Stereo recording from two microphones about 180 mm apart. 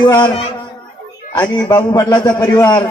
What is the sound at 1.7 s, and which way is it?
A man's voice, 20° left (ahead or behind).